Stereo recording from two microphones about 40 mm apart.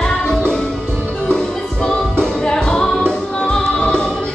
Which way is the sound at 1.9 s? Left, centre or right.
Centre.